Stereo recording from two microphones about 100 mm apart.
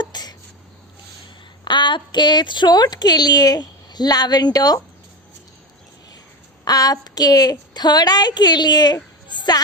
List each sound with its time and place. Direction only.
0.0 s a sound: 45° left (ahead or behind)
1.6 s a woman's voice: 50° left (ahead or behind)
6.7 s a woman's voice: 40° left (ahead or behind)